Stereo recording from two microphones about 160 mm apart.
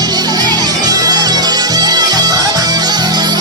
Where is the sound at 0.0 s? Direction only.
25° right (ahead or behind).